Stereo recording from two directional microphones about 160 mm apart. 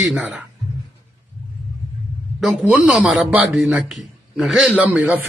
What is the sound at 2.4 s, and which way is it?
A man's voice, 5° right (ahead or behind).